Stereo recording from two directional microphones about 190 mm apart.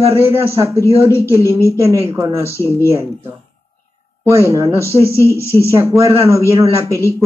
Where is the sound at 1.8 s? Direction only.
15° right (ahead or behind).